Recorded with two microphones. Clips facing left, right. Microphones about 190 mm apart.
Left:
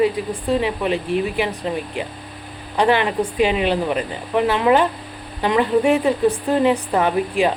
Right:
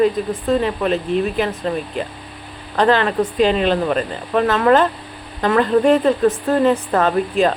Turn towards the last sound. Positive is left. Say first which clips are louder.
# right 2 dB
turn(degrees=10)  # may be behind; listen again after turning